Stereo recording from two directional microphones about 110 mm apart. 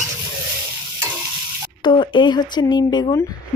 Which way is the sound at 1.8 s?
45° left (ahead or behind).